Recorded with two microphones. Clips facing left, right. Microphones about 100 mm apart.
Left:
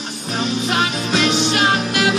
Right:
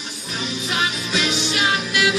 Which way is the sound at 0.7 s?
50° left (ahead or behind).